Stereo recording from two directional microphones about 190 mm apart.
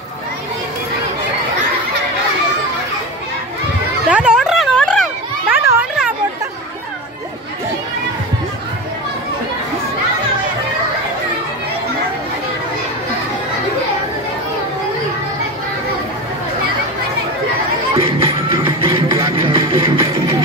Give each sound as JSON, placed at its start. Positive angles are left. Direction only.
{"t": 4.1, "sound": "children playing", "side_deg": -5}
{"t": 5.7, "sound": "children playing", "side_deg": -10}
{"t": 17.9, "sound": "music", "side_deg": -30}